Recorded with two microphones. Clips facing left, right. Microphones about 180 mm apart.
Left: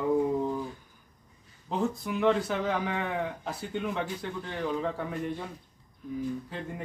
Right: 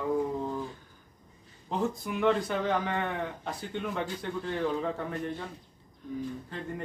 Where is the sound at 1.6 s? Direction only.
Centre (ahead or behind).